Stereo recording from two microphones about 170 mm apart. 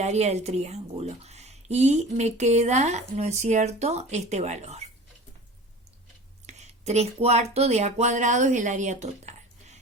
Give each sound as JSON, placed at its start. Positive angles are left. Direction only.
{"t": 0.0, "sound": "speech", "side_deg": -40}
{"t": 6.4, "sound": "speech", "side_deg": -40}